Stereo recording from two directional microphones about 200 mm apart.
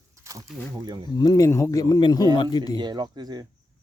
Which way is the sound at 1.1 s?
20° left (ahead or behind).